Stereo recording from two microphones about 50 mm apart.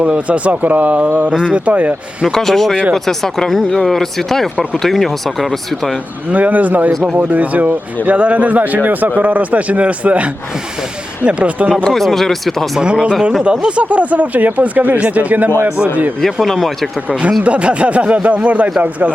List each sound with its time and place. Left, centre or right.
0.0 s speech: right
2.2 s speech: centre
6.3 s speech: right
11.3 s speech: right
11.9 s speech: centre
12.8 s speech: centre
16.2 s speech: centre
17.4 s speech: right